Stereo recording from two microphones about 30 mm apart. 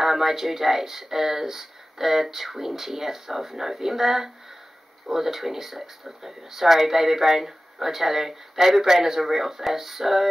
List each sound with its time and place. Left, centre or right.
0.0 s speech: centre